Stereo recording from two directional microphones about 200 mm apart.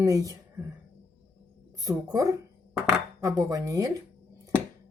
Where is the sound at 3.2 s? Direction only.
15° right (ahead or behind).